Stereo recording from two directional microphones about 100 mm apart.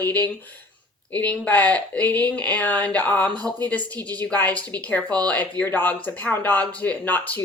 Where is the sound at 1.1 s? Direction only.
15° left (ahead or behind).